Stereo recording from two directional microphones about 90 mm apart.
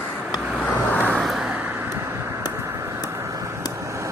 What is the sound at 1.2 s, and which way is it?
Vehicle, 5° right (ahead or behind).